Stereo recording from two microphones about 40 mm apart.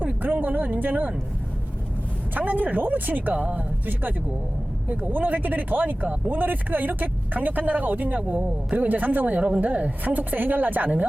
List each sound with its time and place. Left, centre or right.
0.2 s speech: right
2.3 s speech: right
4.9 s a woman's voice: right